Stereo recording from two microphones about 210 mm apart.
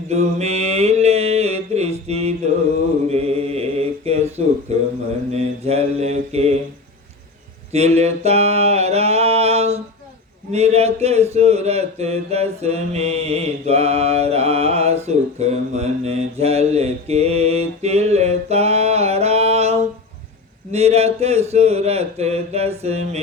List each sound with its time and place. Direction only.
0.1 s mantra: 30° right (ahead or behind)
7.7 s a sound: 30° right (ahead or behind)
10.5 s speech: 30° right (ahead or behind)